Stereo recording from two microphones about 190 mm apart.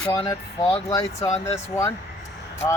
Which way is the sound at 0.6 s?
25° left (ahead or behind).